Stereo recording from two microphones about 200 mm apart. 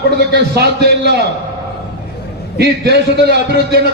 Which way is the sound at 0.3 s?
55° right (ahead or behind).